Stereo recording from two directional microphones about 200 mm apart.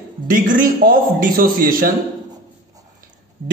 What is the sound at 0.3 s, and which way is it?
A man's voice, 40° right (ahead or behind).